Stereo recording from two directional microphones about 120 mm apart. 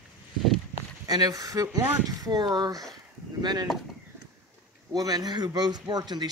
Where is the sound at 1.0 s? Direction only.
30° right (ahead or behind).